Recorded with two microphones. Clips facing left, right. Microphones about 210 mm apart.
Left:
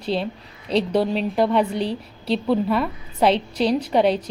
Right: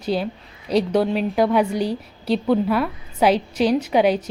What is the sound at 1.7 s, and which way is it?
Speech, 30° left (ahead or behind).